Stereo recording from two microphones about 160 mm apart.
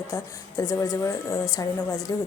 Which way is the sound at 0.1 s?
20° left (ahead or behind).